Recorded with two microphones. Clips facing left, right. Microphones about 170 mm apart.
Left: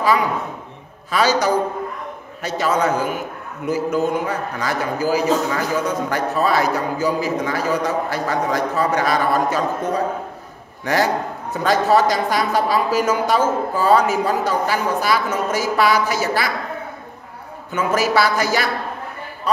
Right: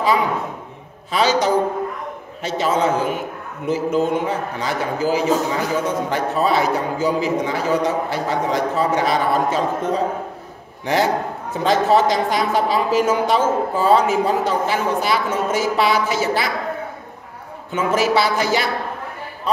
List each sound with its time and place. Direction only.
1.1 s speech: 20° right (ahead or behind)
11.5 s speech: 25° right (ahead or behind)
17.7 s speech: 20° right (ahead or behind)